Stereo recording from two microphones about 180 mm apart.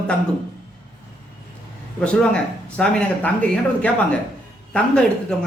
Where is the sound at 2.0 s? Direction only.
5° left (ahead or behind).